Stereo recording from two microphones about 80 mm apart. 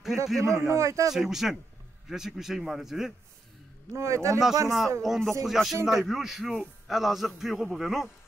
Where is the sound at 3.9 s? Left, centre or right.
Right.